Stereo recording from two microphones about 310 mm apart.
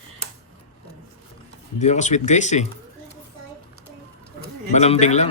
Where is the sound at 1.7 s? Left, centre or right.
Left.